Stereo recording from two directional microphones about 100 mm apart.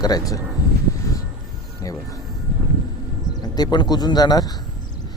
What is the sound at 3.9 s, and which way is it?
Speech, 45° left (ahead or behind).